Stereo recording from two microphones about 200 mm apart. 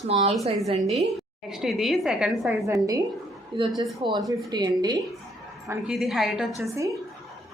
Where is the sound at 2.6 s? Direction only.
15° right (ahead or behind).